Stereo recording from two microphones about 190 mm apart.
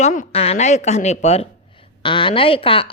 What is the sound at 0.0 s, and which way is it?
A woman's voice, 40° left (ahead or behind).